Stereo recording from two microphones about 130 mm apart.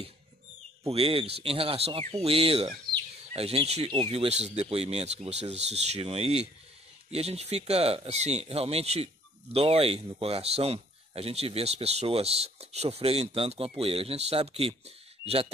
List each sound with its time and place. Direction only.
0.8 s speech: 45° right (ahead or behind)